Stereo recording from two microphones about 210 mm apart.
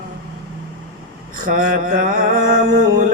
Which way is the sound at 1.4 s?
40° right (ahead or behind).